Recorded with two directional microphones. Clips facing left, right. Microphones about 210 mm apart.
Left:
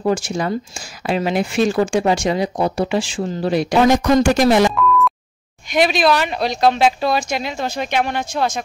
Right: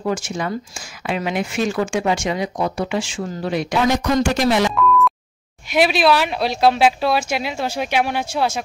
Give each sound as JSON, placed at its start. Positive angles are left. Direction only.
{"t": 0.0, "sound": "speech", "side_deg": 35}
{"t": 4.7, "sound": "busy signal", "side_deg": 0}
{"t": 5.7, "sound": "speech", "side_deg": -5}